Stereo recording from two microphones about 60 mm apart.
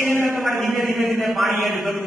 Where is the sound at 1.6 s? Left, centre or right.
Centre.